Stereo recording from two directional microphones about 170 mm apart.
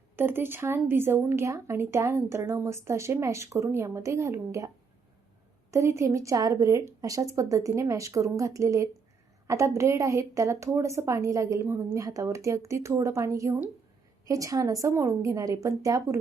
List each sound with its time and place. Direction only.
0.2 s speech: 10° right (ahead or behind)
5.7 s a woman's voice: 15° right (ahead or behind)